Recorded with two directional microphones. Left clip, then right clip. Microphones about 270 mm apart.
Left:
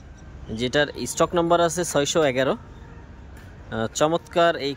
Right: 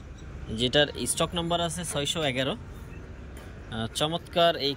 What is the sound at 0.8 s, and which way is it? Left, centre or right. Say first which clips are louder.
Speech: left 4 dB; centre.